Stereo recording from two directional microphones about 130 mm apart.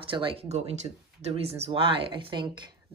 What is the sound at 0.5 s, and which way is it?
Speech, 55° right (ahead or behind).